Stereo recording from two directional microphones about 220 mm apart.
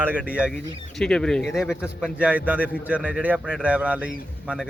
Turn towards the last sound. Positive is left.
turn(degrees=-5)  # may be behind; listen again after turning